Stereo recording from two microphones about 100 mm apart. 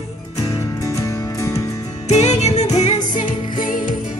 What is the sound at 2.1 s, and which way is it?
Music, 90° left.